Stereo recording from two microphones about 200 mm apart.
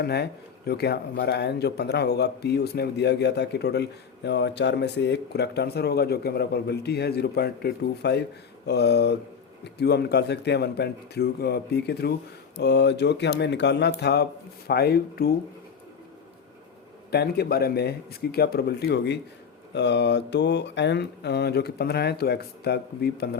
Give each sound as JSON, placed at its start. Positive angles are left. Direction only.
{"t": 0.0, "sound": "speech", "side_deg": 55}
{"t": 17.1, "sound": "speech", "side_deg": 55}